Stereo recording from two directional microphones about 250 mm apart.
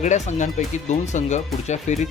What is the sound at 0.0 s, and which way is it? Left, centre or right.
Speech, left.